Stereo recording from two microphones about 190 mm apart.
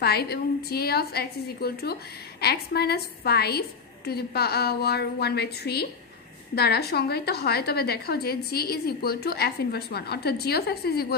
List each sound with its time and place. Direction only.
0.0 s a woman's voice: 55° left (ahead or behind)